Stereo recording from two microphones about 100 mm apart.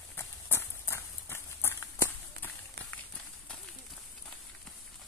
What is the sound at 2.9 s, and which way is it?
Run, 10° left (ahead or behind).